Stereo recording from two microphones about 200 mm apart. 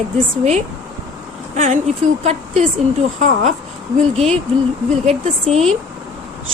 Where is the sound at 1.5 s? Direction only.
35° right (ahead or behind).